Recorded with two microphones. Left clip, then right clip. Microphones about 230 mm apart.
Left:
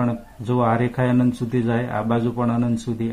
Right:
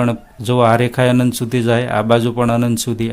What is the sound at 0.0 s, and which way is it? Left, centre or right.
Speech, right.